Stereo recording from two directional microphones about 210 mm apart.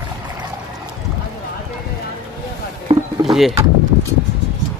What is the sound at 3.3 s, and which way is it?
Bird, centre (ahead or behind).